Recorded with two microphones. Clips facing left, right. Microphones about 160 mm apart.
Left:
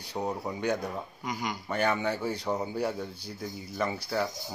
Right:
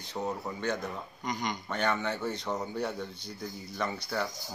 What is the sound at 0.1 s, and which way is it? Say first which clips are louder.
A man's voice: left 2 dB; 15° left (ahead or behind).